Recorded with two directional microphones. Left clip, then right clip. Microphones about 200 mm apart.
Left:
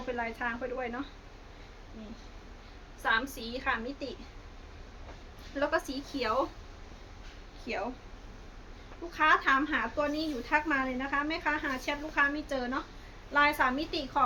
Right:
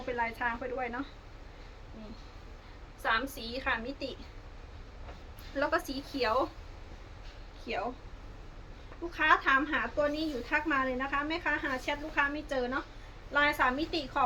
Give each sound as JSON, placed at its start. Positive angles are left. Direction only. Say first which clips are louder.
{"t": 0.0, "sound": "a woman's voice", "louder": "right 1 dB", "side_deg": 0}
{"t": 3.0, "sound": "a woman's voice", "louder": "left 1 dB", "side_deg": 5}
{"t": 5.5, "sound": "a woman's voice", "louder": "even", "side_deg": 0}
{"t": 6.2, "sound": "speech", "louder": "right 1 dB", "side_deg": 10}
{"t": 7.7, "sound": "a woman's voice", "louder": "even", "side_deg": 20}
{"t": 9.1, "sound": "a woman's voice", "louder": "left 1 dB", "side_deg": 25}